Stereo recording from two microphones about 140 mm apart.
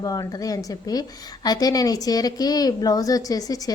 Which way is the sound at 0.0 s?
25° left (ahead or behind).